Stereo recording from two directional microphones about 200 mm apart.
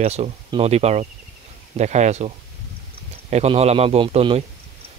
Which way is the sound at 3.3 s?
30° right (ahead or behind).